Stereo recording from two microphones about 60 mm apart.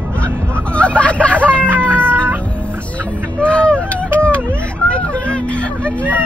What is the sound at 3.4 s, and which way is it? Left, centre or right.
Vehicle, centre.